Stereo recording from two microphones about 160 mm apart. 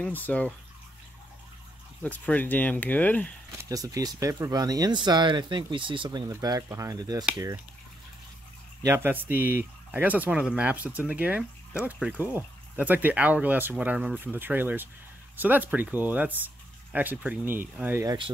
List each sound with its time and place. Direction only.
0.0 s speech: 10° left (ahead or behind)
2.0 s speech: 10° left (ahead or behind)
3.6 s speech: 20° right (ahead or behind)
8.8 s speech: 15° right (ahead or behind)
18.0 s speech: 30° right (ahead or behind)